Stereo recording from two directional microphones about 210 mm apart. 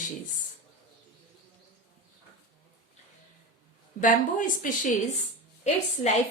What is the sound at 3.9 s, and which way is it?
Speech, 40° left (ahead or behind).